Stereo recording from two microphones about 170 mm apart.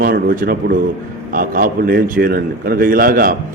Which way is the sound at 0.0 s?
55° right (ahead or behind).